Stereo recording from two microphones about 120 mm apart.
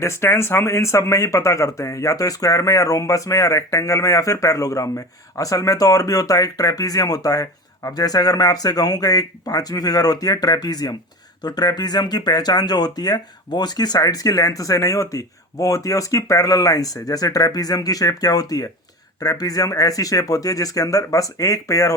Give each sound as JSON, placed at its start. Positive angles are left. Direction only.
{"t": 0.0, "sound": "speech", "side_deg": 20}